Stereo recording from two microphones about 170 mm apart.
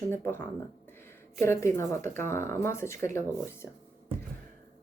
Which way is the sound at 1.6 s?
15° left (ahead or behind).